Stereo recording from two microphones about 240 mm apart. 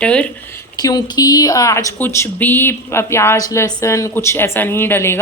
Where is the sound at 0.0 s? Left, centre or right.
Centre.